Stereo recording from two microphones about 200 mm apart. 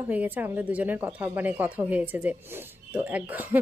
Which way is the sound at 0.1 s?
10° right (ahead or behind).